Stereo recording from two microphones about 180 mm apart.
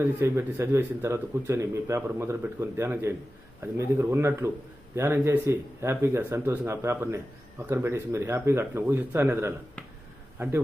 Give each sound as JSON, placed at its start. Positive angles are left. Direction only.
{"t": 0.0, "sound": "a man's voice", "side_deg": -15}